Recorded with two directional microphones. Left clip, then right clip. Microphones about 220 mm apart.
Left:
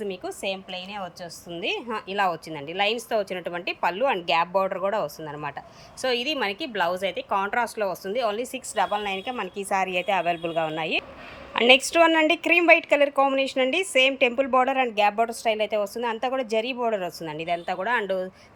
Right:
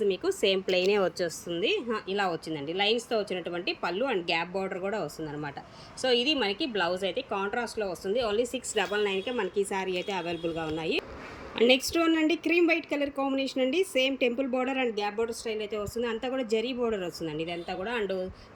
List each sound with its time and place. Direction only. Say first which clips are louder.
0.0 s a woman's voice: right 4 dB; 5° right (ahead or behind)
1.5 s a woman's voice: left 2 dB; centre (ahead or behind)